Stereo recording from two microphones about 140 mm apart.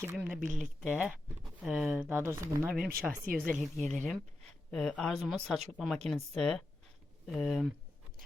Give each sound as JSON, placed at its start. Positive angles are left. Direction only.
{"t": 0.0, "sound": "speech", "side_deg": -15}
{"t": 0.4, "sound": "speech", "side_deg": -60}
{"t": 0.8, "sound": "speech", "side_deg": -5}
{"t": 2.0, "sound": "speech", "side_deg": -15}
{"t": 2.6, "sound": "speech", "side_deg": -5}
{"t": 3.9, "sound": "speech", "side_deg": 10}